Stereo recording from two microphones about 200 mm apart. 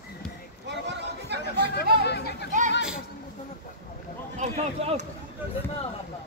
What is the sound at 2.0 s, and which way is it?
Chatter, 55° left (ahead or behind).